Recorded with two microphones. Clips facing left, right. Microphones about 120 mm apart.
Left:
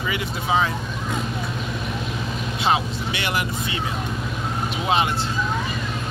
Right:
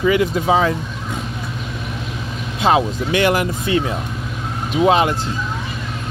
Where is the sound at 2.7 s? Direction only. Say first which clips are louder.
Right 7 dB; 45° right (ahead or behind).